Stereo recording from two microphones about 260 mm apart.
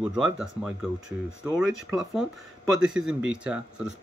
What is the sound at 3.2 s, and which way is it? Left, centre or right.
Speech, centre.